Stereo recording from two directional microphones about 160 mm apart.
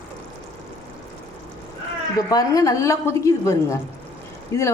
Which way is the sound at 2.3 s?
20° left (ahead or behind).